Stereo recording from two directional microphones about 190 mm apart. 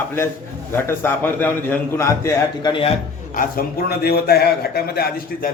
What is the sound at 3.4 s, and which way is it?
A man's voice, 50° left (ahead or behind).